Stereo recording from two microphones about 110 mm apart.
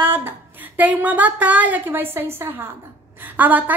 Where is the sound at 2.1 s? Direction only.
20° right (ahead or behind).